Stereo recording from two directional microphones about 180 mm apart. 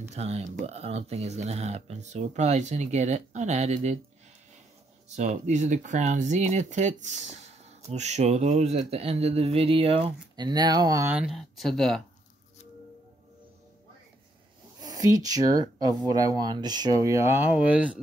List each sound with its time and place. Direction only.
0.1 s speech: 35° right (ahead or behind)
5.1 s speech: 40° right (ahead or behind); by 11.1 s 20° right (ahead or behind)
11.1 s speech: centre (ahead or behind)
14.8 s speech: 20° right (ahead or behind)